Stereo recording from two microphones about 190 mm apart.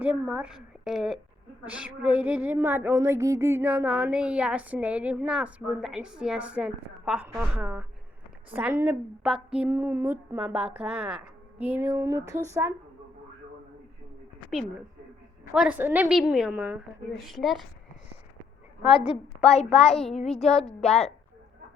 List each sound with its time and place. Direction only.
0.0 s a woman's voice: 5° right (ahead or behind)
15.5 s a woman's voice: 5° right (ahead or behind)
18.8 s a woman's voice: 30° left (ahead or behind)
20.4 s a woman's voice: centre (ahead or behind)
20.7 s a woman's voice: 35° left (ahead or behind)